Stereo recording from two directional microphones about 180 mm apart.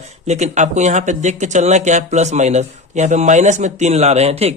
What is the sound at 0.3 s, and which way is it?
Speech, 40° right (ahead or behind).